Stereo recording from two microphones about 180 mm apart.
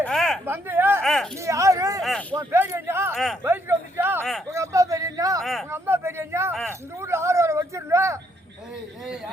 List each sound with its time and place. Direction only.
0.0 s a sound: centre (ahead or behind)
0.4 s speech: 10° right (ahead or behind)
1.0 s speech: centre (ahead or behind)
1.4 s speech: 15° right (ahead or behind)
2.0 s a sound: centre (ahead or behind)
2.4 s a man's voice: 15° right (ahead or behind)
3.4 s a sound: 15° right (ahead or behind)
5.4 s speech: centre (ahead or behind)
5.7 s a man's voice: 15° right (ahead or behind)